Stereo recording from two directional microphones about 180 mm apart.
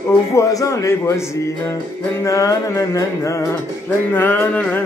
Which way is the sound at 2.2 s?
15° left (ahead or behind).